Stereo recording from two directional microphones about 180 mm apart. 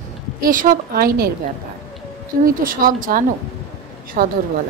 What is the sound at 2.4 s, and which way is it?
A woman's voice, 50° right (ahead or behind).